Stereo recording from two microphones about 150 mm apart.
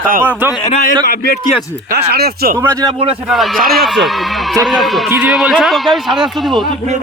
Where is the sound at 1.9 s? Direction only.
90° right.